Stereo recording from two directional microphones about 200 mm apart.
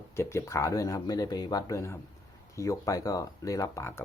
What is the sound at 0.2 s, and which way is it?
Speech, 15° left (ahead or behind).